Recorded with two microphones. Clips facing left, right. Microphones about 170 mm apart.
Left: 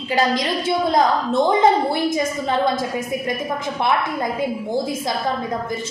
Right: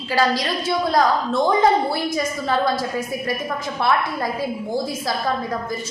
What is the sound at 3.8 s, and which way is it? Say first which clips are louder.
Speech: even; 20° left (ahead or behind).